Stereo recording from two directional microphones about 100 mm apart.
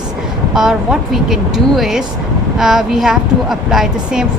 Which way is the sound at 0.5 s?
5° right (ahead or behind).